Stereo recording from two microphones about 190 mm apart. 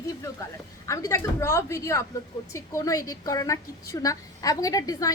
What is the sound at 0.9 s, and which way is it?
A woman's voice, 15° left (ahead or behind).